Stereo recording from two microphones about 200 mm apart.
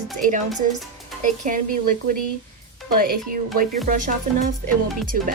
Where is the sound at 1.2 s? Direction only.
40° right (ahead or behind).